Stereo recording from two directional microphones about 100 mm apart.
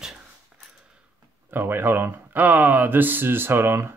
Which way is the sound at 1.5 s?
20° right (ahead or behind).